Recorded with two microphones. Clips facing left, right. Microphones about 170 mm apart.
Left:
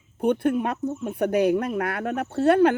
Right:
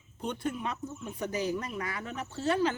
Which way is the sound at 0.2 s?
60° left (ahead or behind).